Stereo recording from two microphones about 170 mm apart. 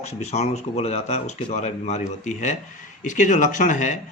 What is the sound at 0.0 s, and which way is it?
Speech, 40° left (ahead or behind).